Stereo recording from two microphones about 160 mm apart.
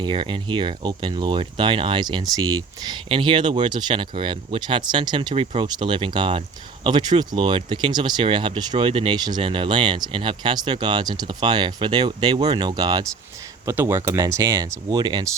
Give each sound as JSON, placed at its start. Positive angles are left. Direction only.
{"t": 0.0, "sound": "speech", "side_deg": -30}